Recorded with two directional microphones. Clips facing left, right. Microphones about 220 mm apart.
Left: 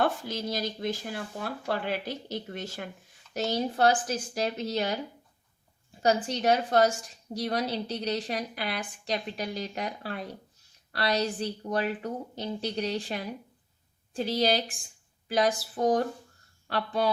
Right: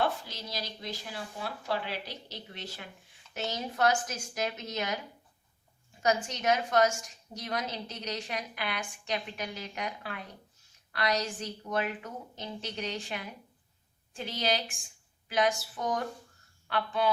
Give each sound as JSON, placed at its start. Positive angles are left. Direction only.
{"t": 0.0, "sound": "speech", "side_deg": 50}
{"t": 3.3, "sound": "a woman's voice", "side_deg": 35}
{"t": 6.0, "sound": "a woman's voice", "side_deg": 35}